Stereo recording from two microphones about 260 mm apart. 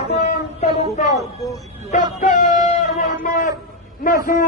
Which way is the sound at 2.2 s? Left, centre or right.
Left.